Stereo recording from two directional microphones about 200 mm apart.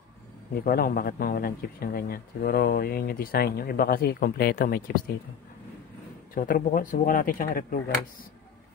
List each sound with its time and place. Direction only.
0.7 s speech: 45° left (ahead or behind)
6.3 s speech: 45° left (ahead or behind)